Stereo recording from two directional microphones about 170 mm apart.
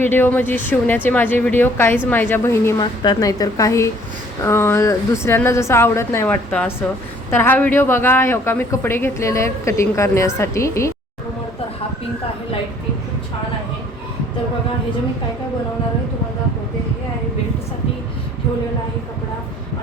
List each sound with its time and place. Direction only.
0.0 s a woman's voice: 10° left (ahead or behind)